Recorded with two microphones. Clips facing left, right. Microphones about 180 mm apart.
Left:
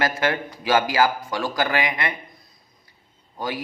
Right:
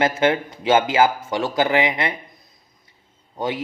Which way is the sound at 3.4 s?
25° right (ahead or behind).